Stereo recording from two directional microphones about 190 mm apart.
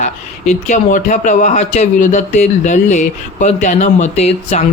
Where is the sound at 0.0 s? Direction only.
40° left (ahead or behind).